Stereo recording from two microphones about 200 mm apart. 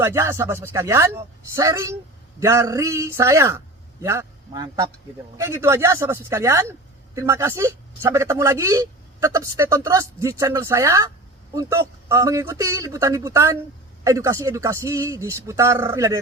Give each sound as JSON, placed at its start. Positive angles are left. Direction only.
{"t": 0.0, "sound": "speech", "side_deg": -10}